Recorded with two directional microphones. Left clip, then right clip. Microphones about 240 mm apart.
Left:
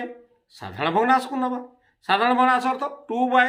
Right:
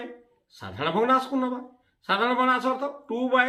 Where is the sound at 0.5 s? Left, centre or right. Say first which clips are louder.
Left 4 dB; left.